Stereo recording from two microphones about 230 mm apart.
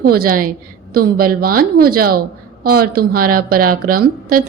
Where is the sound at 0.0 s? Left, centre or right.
Right.